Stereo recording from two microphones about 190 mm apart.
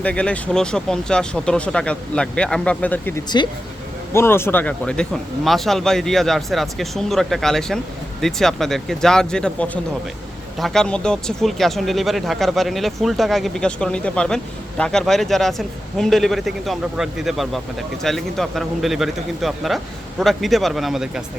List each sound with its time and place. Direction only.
0.0 s speech: 5° left (ahead or behind)
3.2 s speech: 25° left (ahead or behind)
4.1 s speech: 15° left (ahead or behind); by 21.2 s 5° right (ahead or behind)